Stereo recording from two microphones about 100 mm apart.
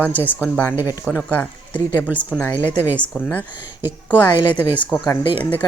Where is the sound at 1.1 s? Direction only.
15° left (ahead or behind).